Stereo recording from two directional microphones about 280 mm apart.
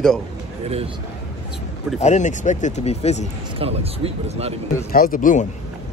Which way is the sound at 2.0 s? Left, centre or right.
Left.